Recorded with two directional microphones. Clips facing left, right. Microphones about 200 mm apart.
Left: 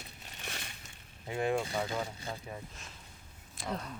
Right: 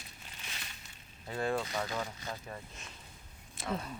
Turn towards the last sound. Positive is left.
turn(degrees=-5)  # may be behind; listen again after turning